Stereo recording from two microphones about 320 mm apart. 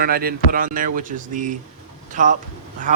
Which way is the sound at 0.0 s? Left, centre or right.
Right.